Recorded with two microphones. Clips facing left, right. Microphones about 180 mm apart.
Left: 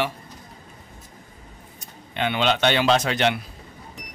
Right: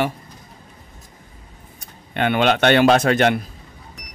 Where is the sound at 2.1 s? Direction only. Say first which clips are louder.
Right 5 dB; 55° right (ahead or behind).